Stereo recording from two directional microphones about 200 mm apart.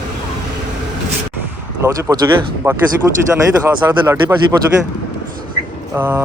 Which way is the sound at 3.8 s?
15° right (ahead or behind).